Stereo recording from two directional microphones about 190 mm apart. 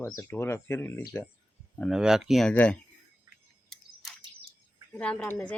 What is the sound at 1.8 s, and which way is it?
Speech, centre (ahead or behind).